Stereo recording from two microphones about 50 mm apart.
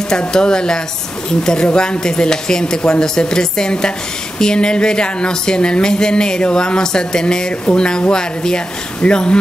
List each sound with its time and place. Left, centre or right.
0.3 s speech: centre